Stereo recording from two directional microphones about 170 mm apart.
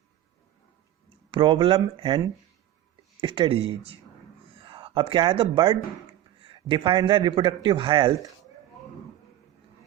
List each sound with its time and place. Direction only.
1.3 s a man's voice: 30° right (ahead or behind)